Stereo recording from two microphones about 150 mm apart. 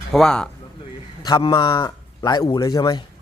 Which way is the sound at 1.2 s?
30° left (ahead or behind).